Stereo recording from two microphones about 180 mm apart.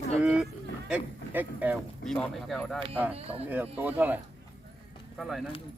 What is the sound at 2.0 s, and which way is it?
Speech, 5° left (ahead or behind).